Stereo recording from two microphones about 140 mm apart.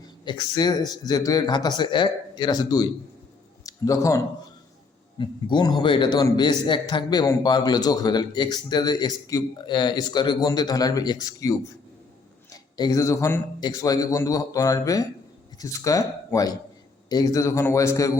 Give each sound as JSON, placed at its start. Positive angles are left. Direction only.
{"t": 0.0, "sound": "a man's voice", "side_deg": 30}
{"t": 5.1, "sound": "a man's voice", "side_deg": 35}